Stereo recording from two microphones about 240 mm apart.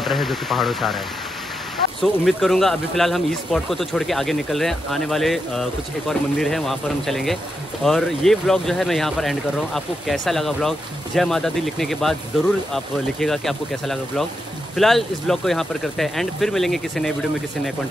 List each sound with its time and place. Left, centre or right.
0.0 s speech: centre